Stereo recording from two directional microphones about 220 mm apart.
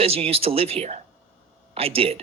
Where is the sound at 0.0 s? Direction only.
25° right (ahead or behind).